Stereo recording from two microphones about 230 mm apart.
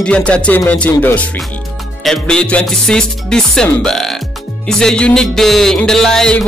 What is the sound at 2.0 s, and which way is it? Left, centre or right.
Music, centre.